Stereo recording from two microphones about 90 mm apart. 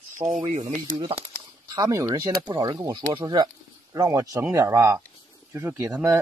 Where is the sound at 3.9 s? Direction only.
35° right (ahead or behind).